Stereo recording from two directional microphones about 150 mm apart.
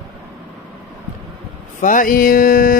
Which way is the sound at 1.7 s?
60° left (ahead or behind).